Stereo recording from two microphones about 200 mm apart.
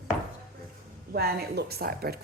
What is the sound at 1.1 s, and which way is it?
A woman's voice, 50° right (ahead or behind).